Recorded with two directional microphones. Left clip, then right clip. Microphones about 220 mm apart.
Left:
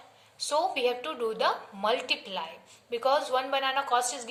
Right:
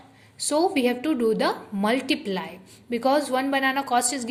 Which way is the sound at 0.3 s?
30° right (ahead or behind).